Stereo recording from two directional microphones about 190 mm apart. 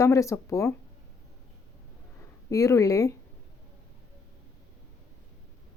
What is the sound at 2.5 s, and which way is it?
Speech, 15° left (ahead or behind).